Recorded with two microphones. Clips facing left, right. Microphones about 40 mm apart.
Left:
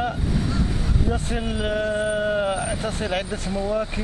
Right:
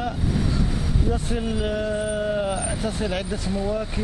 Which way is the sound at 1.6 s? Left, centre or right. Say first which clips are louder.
Left 5 dB; left.